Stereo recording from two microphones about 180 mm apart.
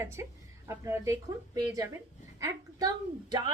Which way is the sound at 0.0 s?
15° right (ahead or behind).